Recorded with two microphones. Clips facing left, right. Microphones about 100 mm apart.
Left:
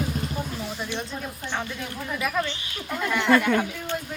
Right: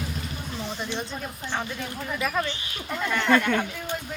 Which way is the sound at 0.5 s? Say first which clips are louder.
Even; 5° left (ahead or behind).